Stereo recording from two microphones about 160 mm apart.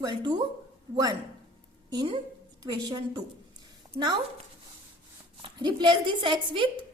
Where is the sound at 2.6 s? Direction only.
25° right (ahead or behind).